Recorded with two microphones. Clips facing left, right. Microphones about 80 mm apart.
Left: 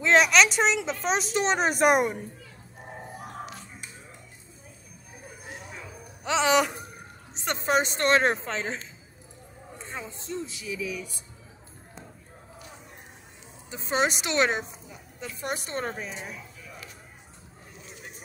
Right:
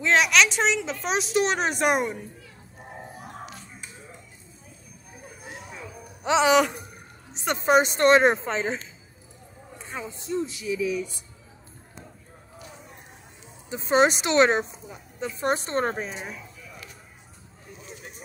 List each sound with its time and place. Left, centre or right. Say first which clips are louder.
0.0 s speech: left 1 dB; centre
6.4 s speech: right 2 dB; centre
7.4 s a woman's voice: right 5 dB; centre
9.8 s a man's voice: right 3 dB; centre
13.7 s a woman's voice: right 6 dB; right